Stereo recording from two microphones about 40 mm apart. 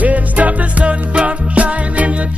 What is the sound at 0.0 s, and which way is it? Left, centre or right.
Music, right.